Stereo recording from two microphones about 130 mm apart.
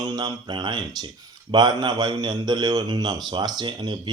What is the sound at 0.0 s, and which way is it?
Speech, 30° right (ahead or behind).